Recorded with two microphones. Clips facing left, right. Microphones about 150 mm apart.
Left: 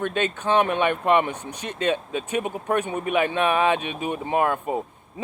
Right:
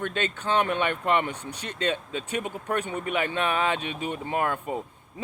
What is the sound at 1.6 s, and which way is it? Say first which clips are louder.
Speech: left 4 dB; 55° left (ahead or behind).